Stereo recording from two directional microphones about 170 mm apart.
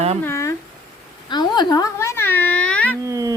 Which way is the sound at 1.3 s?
25° left (ahead or behind).